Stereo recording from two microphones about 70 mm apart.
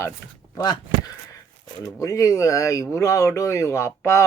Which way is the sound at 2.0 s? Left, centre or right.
Left.